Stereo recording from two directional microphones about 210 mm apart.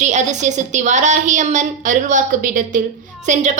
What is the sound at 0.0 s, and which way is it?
A woman's voice, 35° right (ahead or behind).